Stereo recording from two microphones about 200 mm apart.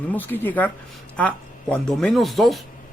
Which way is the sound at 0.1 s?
10° left (ahead or behind).